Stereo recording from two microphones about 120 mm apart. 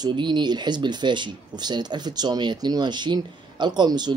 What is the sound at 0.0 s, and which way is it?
Speech, 40° right (ahead or behind).